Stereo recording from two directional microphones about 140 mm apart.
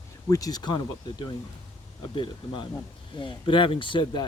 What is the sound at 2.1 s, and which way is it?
Speech, 35° left (ahead or behind).